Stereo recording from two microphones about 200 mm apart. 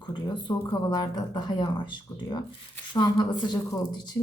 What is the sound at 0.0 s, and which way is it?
Speech, 20° left (ahead or behind).